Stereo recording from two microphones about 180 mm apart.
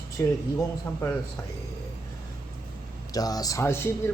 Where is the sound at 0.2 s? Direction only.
15° left (ahead or behind).